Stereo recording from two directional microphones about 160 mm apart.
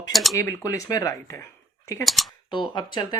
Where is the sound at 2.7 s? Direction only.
30° left (ahead or behind).